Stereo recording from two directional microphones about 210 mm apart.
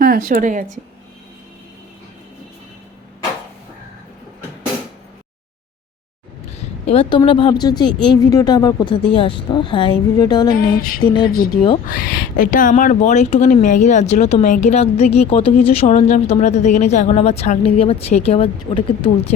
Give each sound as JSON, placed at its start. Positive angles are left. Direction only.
{"t": 0.0, "sound": "a woman's voice", "side_deg": -45}
{"t": 6.8, "sound": "a woman's voice", "side_deg": 25}
{"t": 10.5, "sound": "a sound", "side_deg": 45}
{"t": 11.9, "sound": "speech", "side_deg": 45}